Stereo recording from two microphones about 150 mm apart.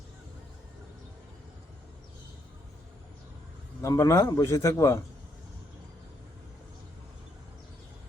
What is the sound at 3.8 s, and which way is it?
A man's voice, 20° left (ahead or behind).